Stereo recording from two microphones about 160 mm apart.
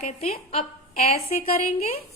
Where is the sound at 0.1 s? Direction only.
40° left (ahead or behind).